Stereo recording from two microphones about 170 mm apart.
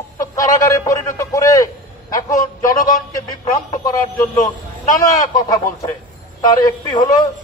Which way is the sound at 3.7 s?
20° left (ahead or behind).